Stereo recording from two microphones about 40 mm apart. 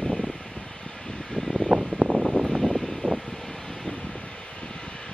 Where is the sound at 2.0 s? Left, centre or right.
Right.